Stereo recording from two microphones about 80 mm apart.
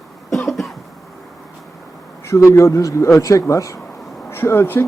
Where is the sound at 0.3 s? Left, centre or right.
Centre.